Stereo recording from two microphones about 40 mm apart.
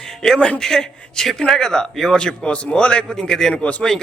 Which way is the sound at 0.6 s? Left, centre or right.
Centre.